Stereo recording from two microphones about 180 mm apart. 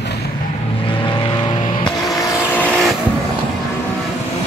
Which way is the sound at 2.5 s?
5° left (ahead or behind).